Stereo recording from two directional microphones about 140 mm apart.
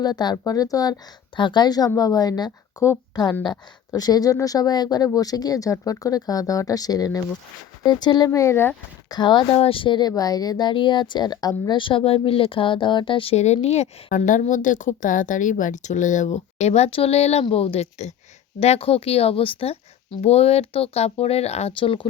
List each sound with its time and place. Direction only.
0.0 s a woman's voice: 30° left (ahead or behind)
9.0 s a woman's voice: 30° left (ahead or behind)